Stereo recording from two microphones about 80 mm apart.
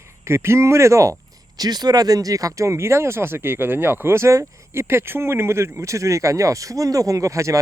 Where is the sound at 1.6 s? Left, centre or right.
Right.